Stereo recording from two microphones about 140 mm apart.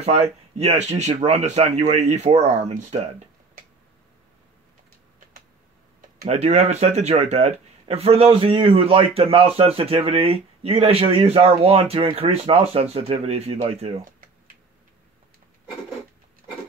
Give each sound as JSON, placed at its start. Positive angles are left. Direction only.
{"t": 0.0, "sound": "speech", "side_deg": -50}
{"t": 6.2, "sound": "speech", "side_deg": -50}